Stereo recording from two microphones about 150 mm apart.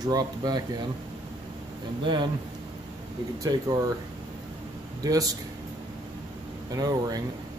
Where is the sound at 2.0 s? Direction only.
30° right (ahead or behind).